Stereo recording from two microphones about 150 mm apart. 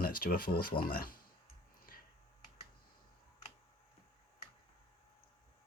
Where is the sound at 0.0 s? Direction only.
75° left (ahead or behind).